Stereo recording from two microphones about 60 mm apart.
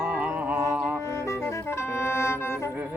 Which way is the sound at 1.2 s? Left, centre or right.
Left.